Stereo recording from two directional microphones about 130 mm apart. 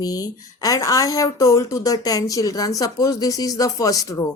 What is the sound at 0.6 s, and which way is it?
A woman's voice, 25° left (ahead or behind).